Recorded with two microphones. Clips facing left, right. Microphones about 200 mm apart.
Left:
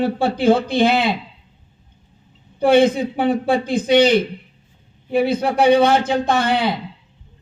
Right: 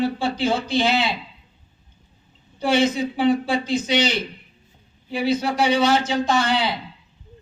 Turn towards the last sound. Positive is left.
turn(degrees=55)  # may be behind; listen again after turning